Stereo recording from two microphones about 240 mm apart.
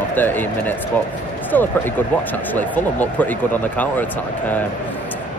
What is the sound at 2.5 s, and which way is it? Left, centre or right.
Speech, centre.